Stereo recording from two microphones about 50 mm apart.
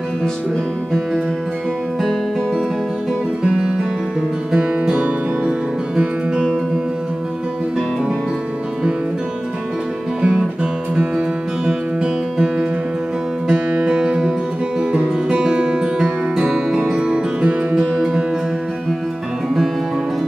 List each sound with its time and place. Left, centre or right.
3.4 s music: centre
10.2 s music: right